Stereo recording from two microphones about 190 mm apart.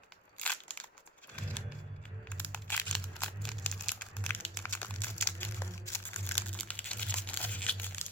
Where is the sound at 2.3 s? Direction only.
10° left (ahead or behind).